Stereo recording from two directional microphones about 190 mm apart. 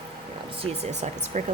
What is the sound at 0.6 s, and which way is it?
Speech, 35° right (ahead or behind).